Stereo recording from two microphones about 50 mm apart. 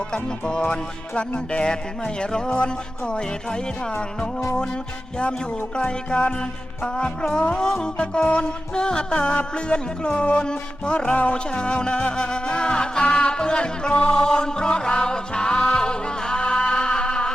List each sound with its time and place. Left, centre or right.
0.1 s music: centre
5.7 s music: centre